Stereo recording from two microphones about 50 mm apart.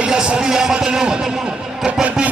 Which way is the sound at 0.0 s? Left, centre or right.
Centre.